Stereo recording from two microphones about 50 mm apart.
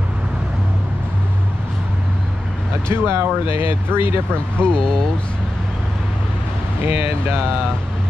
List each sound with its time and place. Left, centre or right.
2.9 s speech: right
4.3 s speech: centre